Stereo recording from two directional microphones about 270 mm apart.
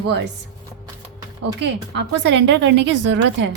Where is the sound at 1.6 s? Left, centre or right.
Right.